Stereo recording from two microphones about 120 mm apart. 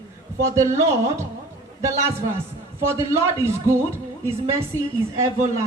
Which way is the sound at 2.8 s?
20° right (ahead or behind).